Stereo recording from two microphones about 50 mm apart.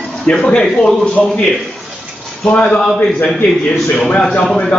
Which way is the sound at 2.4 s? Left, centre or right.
Left.